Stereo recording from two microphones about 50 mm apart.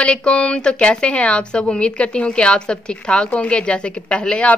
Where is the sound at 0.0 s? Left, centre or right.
Left.